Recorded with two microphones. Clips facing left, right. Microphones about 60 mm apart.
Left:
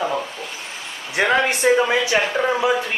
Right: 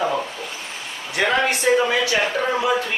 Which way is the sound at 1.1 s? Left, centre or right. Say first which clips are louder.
Left 2 dB; left.